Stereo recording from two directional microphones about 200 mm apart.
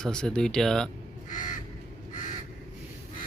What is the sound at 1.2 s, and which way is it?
Crow, 40° left (ahead or behind).